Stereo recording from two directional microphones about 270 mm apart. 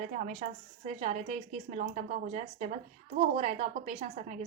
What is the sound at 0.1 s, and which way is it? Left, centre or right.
A woman's voice, right.